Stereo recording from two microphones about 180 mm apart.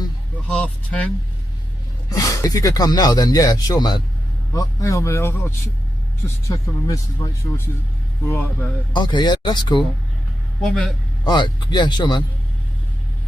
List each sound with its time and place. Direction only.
0.5 s speech: 5° left (ahead or behind)
2.0 s speech: 20° left (ahead or behind)
8.9 s speech: 25° left (ahead or behind)
10.7 s a man's voice: centre (ahead or behind)
11.2 s speech: 25° left (ahead or behind)